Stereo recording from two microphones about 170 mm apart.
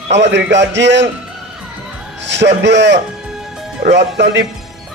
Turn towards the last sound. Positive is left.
turn(degrees=-90)